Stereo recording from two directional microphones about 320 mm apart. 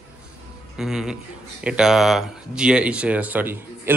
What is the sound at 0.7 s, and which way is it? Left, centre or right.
Speech, centre.